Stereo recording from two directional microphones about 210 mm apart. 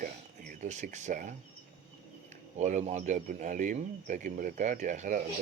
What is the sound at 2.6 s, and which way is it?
Speech, 35° right (ahead or behind).